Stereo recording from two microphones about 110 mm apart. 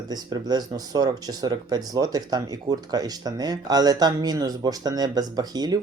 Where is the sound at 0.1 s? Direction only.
35° right (ahead or behind).